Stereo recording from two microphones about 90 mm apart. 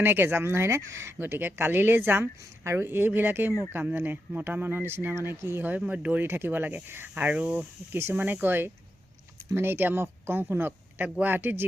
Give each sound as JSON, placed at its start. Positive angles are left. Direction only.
{"t": 0.0, "sound": "speech", "side_deg": -25}